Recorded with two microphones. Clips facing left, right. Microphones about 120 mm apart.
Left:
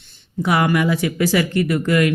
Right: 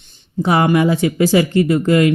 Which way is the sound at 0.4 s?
30° right (ahead or behind).